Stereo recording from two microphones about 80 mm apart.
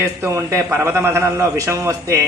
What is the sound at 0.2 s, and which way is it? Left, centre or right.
A man's voice, right.